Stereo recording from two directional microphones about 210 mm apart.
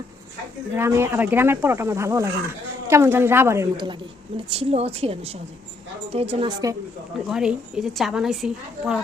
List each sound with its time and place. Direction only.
0.7 s speech: 10° right (ahead or behind); by 6.5 s 30° right (ahead or behind)
7.3 s a woman's voice: 5° right (ahead or behind)